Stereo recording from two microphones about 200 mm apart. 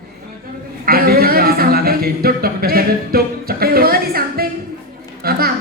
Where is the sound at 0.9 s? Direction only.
50° right (ahead or behind).